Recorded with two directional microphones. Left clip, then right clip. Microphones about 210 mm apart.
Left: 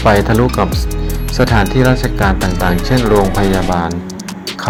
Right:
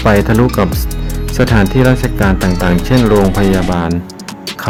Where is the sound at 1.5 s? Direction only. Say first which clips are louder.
Right 1 dB; 15° right (ahead or behind).